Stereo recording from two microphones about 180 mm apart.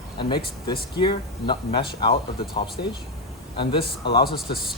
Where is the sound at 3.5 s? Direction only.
25° left (ahead or behind).